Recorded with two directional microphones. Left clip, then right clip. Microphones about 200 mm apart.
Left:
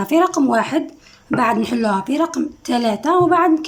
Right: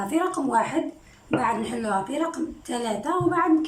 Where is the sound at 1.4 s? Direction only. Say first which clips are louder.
Left 10 dB; 50° left (ahead or behind).